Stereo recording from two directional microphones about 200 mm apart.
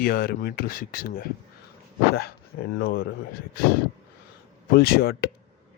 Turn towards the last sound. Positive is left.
turn(degrees=50)  # may be behind; listen again after turning